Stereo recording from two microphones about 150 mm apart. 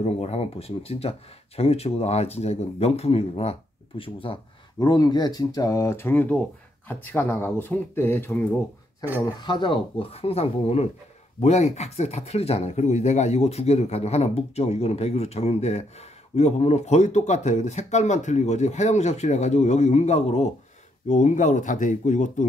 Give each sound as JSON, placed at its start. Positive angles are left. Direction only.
{"t": 0.0, "sound": "speech", "side_deg": 45}
{"t": 9.4, "sound": "speech", "side_deg": 30}